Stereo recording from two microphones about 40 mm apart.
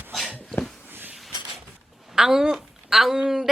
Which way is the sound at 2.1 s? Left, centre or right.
Centre.